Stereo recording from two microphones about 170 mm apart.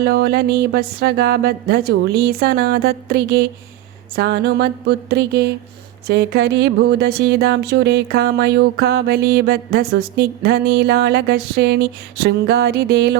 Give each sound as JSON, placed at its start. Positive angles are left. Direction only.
{"t": 0.0, "sound": "speech", "side_deg": -70}